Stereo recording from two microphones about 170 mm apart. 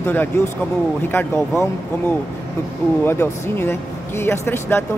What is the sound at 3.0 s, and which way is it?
A man's voice, 15° left (ahead or behind).